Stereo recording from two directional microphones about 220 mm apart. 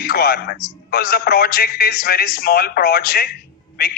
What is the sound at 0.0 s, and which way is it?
A man's voice, 45° left (ahead or behind).